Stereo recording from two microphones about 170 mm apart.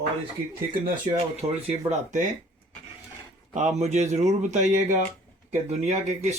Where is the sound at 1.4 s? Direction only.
15° right (ahead or behind).